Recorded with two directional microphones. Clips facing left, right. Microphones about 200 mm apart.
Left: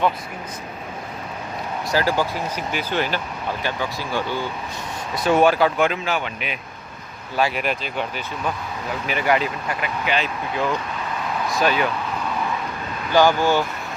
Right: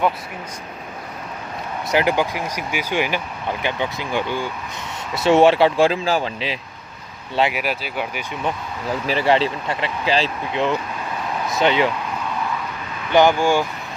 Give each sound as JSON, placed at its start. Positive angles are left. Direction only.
{"t": 1.9, "sound": "speech", "side_deg": -20}
{"t": 7.5, "sound": "speech", "side_deg": -5}
{"t": 9.0, "sound": "speech", "side_deg": -30}
{"t": 13.1, "sound": "speech", "side_deg": -20}